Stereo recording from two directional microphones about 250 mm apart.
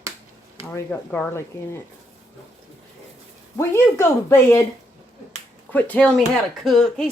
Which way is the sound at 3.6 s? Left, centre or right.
Centre.